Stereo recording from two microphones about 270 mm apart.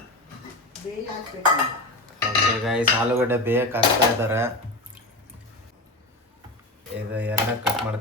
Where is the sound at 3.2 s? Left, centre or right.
Centre.